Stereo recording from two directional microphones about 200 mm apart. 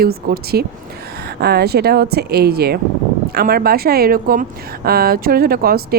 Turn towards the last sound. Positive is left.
turn(degrees=-50)  # may be behind; listen again after turning